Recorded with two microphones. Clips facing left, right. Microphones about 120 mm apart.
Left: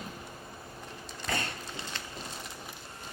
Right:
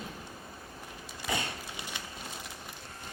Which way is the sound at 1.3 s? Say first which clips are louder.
Even; 15° right (ahead or behind).